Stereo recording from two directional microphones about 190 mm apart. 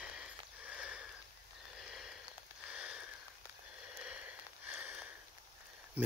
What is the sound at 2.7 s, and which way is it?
Sniff, 5° right (ahead or behind).